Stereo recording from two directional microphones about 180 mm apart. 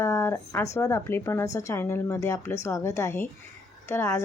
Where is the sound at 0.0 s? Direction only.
15° left (ahead or behind).